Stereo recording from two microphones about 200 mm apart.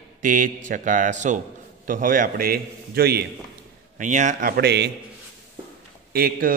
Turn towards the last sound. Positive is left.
turn(degrees=-50)  # may be behind; listen again after turning